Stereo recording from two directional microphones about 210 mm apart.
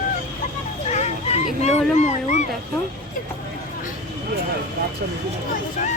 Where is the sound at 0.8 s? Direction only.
30° left (ahead or behind).